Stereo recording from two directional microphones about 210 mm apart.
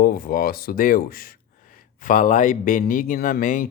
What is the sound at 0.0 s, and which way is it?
Speech, 45° left (ahead or behind).